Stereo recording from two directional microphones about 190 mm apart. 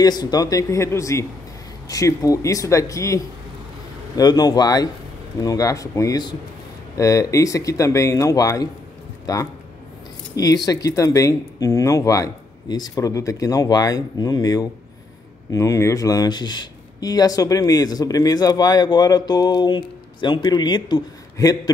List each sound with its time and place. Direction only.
0.0 s a man's voice: 20° left (ahead or behind)